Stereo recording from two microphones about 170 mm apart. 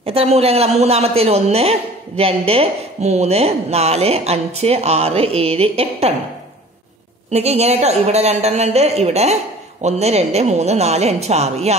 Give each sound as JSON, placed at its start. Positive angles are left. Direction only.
{"t": 0.0, "sound": "a woman's voice", "side_deg": -35}
{"t": 7.2, "sound": "a woman's voice", "side_deg": -40}